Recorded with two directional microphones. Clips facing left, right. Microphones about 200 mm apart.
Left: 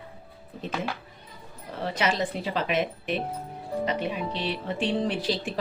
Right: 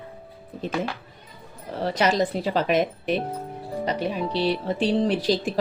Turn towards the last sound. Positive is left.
turn(degrees=-40)  # may be behind; listen again after turning